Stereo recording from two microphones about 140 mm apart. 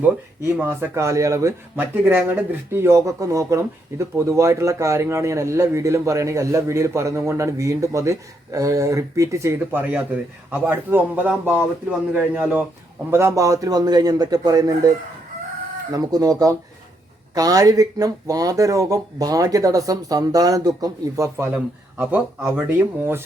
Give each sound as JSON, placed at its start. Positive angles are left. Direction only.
{"t": 0.0, "sound": "speech", "side_deg": -15}
{"t": 15.9, "sound": "speech", "side_deg": -25}